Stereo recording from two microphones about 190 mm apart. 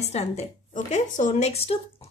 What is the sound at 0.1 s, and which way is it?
A woman's voice, 35° left (ahead or behind).